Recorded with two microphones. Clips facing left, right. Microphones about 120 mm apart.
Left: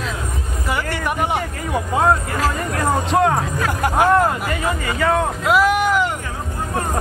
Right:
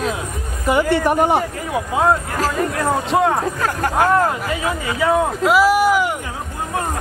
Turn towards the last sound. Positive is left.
turn(degrees=-10)  # may be behind; listen again after turning